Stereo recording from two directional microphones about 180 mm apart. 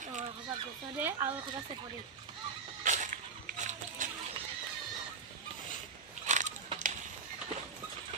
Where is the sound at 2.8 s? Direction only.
45° right (ahead or behind).